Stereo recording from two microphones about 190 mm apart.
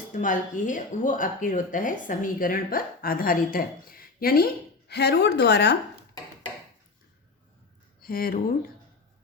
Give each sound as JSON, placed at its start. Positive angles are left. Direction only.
{"t": 0.1, "sound": "a woman's voice", "side_deg": 45}
{"t": 8.0, "sound": "speech", "side_deg": 50}